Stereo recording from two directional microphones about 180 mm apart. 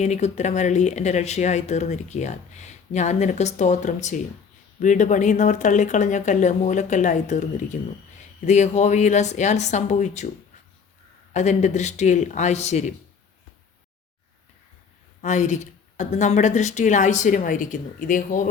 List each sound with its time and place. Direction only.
0.0 s speech: 40° left (ahead or behind)
11.3 s speech: 40° left (ahead or behind)
15.2 s speech: 40° left (ahead or behind)